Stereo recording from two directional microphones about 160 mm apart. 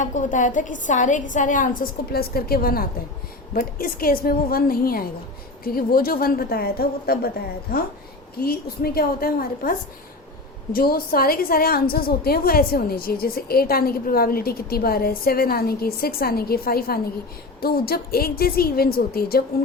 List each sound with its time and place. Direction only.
0.0 s a woman's voice: 50° left (ahead or behind); by 7.2 s 70° left (ahead or behind)
8.4 s a woman's voice: 70° left (ahead or behind)